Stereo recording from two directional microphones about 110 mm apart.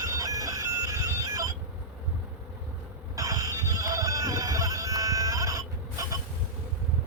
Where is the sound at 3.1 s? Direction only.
30° right (ahead or behind).